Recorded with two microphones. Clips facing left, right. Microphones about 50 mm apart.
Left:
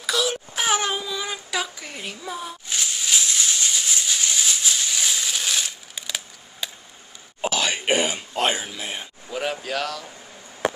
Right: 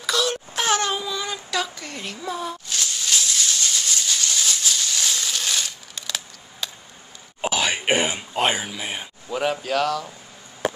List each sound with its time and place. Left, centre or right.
0.0 s a sound: centre
7.4 s throat clearing: centre
8.2 s speech: centre